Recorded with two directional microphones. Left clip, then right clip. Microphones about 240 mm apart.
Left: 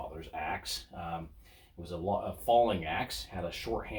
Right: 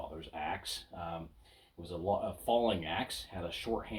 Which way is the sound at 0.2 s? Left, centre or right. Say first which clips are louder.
Left 2 dB; right.